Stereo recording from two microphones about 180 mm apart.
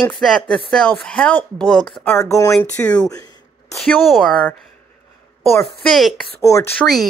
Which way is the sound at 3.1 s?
20° left (ahead or behind).